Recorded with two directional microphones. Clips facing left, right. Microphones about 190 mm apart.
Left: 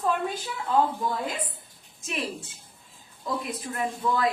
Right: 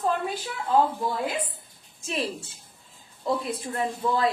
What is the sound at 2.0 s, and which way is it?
Speech, 30° right (ahead or behind).